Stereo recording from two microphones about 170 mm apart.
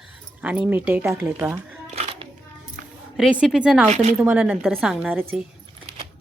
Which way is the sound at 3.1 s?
5° right (ahead or behind).